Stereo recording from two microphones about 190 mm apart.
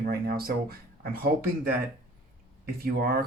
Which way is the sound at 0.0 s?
55° right (ahead or behind).